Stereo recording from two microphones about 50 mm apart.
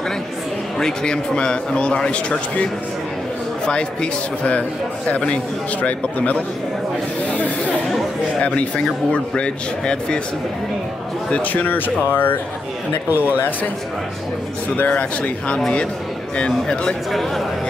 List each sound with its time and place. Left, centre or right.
0.7 s a man's voice: centre
7.2 s a sound: left
8.4 s a man's voice: left
11.2 s speech: left
13.1 s speech: right
14.8 s a man's voice: left
17.1 s speech: centre